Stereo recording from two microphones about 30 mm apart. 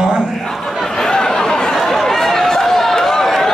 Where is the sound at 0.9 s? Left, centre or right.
Left.